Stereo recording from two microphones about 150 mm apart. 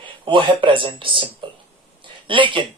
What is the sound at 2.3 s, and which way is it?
Speech, 35° right (ahead or behind).